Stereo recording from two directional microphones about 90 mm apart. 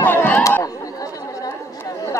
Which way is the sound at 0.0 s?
25° left (ahead or behind).